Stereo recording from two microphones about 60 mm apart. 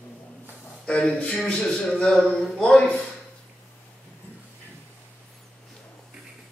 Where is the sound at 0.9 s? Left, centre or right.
Centre.